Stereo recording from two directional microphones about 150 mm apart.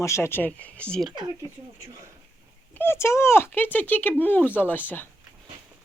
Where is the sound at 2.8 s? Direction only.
15° left (ahead or behind).